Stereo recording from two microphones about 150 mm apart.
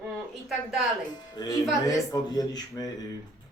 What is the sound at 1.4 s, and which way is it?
Speech, 30° left (ahead or behind).